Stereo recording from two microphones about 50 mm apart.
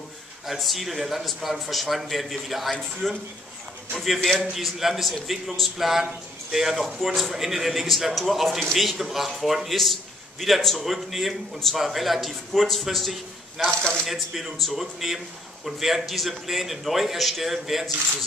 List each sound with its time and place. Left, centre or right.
0.5 s a man's voice: centre
13.6 s speech: centre
14.0 s a man's voice: centre